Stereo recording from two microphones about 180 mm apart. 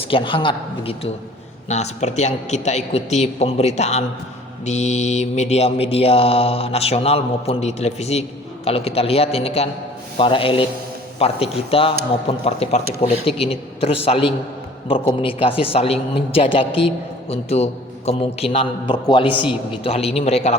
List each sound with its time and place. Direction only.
0.0 s a man's voice: 30° left (ahead or behind)
19.3 s a man's voice: 10° right (ahead or behind)
19.8 s a woman's voice: 35° left (ahead or behind)